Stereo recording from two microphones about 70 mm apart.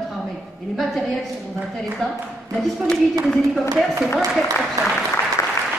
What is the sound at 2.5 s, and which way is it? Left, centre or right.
A woman's voice, centre.